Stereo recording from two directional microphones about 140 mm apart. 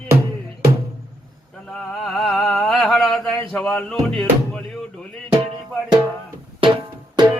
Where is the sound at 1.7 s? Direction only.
Centre (ahead or behind).